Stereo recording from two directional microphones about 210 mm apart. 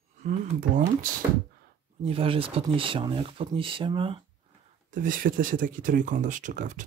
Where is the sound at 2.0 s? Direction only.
25° right (ahead or behind).